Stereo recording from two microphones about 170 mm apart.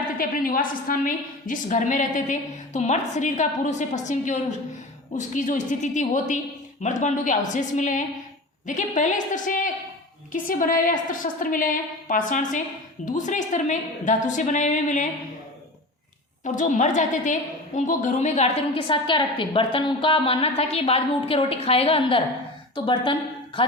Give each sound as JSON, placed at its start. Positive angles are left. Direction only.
{"t": 0.2, "sound": "a woman's voice", "side_deg": 55}
{"t": 16.4, "sound": "a woman's voice", "side_deg": 45}